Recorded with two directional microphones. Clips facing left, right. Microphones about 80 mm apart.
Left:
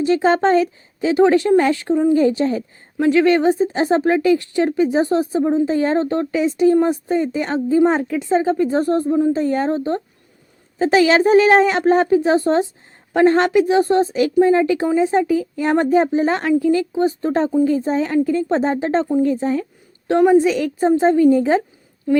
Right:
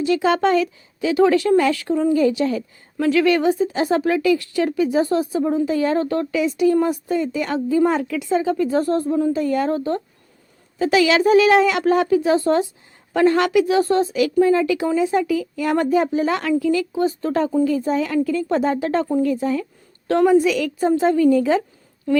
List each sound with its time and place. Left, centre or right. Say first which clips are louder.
0.0 s speech: left 2 dB; left
2.1 s speech: left 2 dB; left
20.1 s speech: left 2 dB; left